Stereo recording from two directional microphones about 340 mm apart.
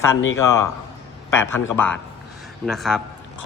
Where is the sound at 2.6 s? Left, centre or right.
Centre.